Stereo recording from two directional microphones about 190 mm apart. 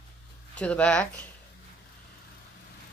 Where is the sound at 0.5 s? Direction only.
5° left (ahead or behind).